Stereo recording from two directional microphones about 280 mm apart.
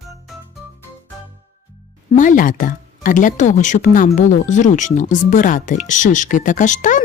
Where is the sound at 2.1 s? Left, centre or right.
Left.